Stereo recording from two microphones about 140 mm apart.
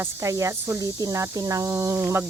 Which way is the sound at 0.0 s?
20° right (ahead or behind).